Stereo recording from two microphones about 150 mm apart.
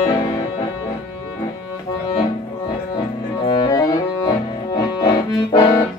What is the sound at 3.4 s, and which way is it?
Music, 25° left (ahead or behind).